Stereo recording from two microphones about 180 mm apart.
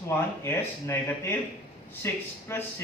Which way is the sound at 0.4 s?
15° left (ahead or behind).